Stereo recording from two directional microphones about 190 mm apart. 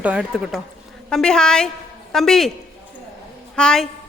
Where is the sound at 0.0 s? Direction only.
5° right (ahead or behind).